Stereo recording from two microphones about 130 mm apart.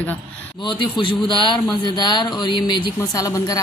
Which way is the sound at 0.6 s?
40° left (ahead or behind).